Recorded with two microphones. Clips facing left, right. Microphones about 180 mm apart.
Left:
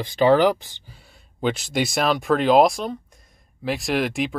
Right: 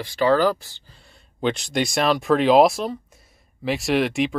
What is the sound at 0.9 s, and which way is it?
Speech, 5° left (ahead or behind).